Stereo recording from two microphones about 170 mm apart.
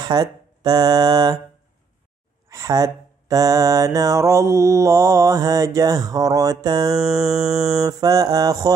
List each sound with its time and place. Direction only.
0.0 s speech: 25° right (ahead or behind)
2.5 s mantra: 20° right (ahead or behind)
7.0 s music: centre (ahead or behind)
7.3 s mantra: 20° right (ahead or behind)